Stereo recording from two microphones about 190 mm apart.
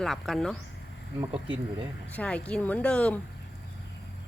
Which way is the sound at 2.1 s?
5° left (ahead or behind).